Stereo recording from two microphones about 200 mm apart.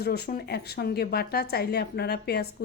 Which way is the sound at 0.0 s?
50° left (ahead or behind).